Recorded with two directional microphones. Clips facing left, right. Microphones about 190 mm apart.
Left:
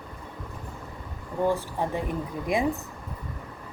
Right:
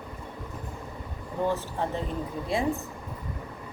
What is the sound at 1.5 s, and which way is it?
Speech, 15° left (ahead or behind).